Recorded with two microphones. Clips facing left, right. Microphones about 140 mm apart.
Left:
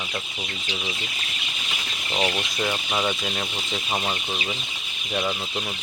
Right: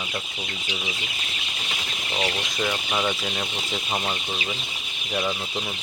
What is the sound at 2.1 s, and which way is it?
Speech, 15° left (ahead or behind).